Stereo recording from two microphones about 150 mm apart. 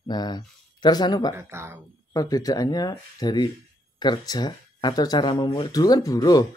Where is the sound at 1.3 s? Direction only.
15° right (ahead or behind).